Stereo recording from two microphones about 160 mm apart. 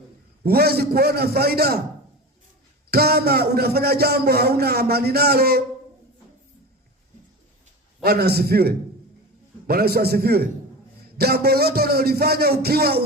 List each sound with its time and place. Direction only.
0.4 s a man's voice: 75° right (ahead or behind)
2.9 s a man's voice: 75° right (ahead or behind)
8.0 s a man's voice: 80° right